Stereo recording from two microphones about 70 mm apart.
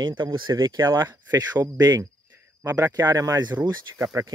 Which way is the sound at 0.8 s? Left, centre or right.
Right.